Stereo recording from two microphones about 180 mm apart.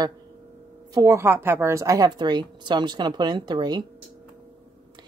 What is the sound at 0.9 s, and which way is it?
A woman's voice, 15° right (ahead or behind).